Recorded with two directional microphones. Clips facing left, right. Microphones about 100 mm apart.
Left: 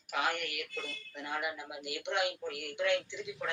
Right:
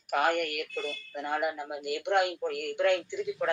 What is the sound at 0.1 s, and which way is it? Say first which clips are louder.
A man's voice: right 7 dB; 50° right (ahead or behind).